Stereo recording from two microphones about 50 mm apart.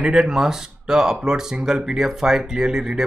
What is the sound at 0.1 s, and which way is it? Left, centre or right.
Speech, centre.